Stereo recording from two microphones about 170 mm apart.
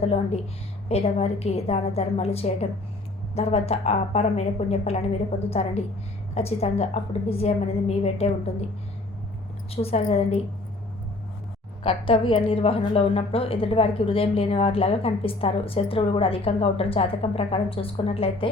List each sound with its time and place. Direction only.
0.0 s a woman's voice: 35° left (ahead or behind)
9.7 s a woman's voice: 35° left (ahead or behind)
11.8 s a woman's voice: 30° left (ahead or behind)